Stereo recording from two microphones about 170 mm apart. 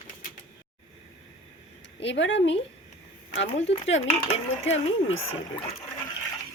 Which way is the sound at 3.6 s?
35° left (ahead or behind).